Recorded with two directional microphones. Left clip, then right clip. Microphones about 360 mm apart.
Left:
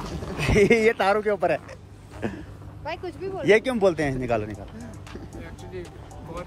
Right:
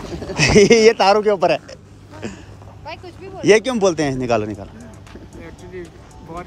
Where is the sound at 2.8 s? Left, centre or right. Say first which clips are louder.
Left 2 dB; left.